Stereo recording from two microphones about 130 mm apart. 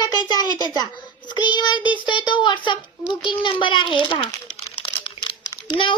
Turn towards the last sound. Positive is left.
turn(degrees=40)  # may be behind; listen again after turning